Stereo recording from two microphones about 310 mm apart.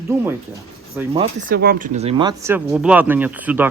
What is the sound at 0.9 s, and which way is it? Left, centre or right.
Speech, centre.